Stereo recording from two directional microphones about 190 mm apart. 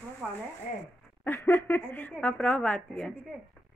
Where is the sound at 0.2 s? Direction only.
5° right (ahead or behind).